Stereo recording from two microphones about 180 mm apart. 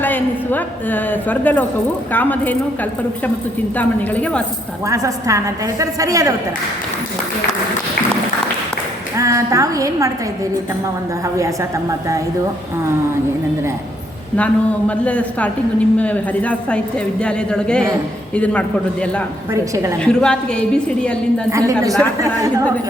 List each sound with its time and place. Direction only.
0.0 s a woman's voice: 10° left (ahead or behind)
3.8 s a woman's voice: 10° left (ahead or behind)
4.9 s a woman's voice: 15° right (ahead or behind)
9.1 s a woman's voice: 15° right (ahead or behind)
11.3 s a woman's voice: 15° right (ahead or behind)
14.3 s a woman's voice: 5° left (ahead or behind)
19.5 s a woman's voice: 15° right (ahead or behind)
20.1 s a woman's voice: 5° left (ahead or behind)
21.5 s a woman's voice: 20° right (ahead or behind)